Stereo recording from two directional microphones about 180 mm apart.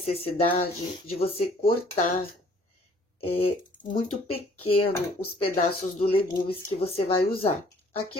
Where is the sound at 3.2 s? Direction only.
30° left (ahead or behind).